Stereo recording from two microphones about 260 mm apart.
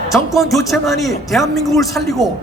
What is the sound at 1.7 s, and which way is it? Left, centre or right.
Speech, centre.